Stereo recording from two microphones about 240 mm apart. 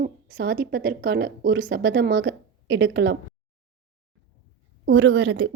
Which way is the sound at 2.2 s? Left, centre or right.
Right.